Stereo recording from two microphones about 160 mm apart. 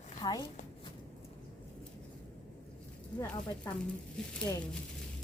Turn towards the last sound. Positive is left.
turn(degrees=5)  # may be behind; listen again after turning